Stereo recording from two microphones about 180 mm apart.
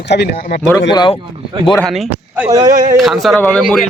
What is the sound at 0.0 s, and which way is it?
Speech, 70° left (ahead or behind).